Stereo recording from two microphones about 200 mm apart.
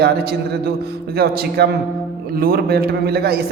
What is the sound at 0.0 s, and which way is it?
A man's voice, 50° right (ahead or behind).